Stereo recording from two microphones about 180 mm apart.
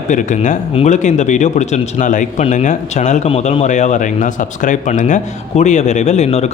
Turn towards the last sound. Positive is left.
turn(degrees=35)  # may be behind; listen again after turning